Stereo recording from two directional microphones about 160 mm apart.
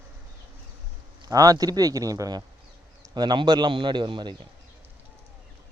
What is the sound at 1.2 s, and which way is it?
Speech, 20° right (ahead or behind).